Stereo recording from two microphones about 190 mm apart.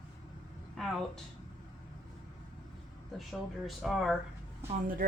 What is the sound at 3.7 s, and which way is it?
Speech, centre (ahead or behind).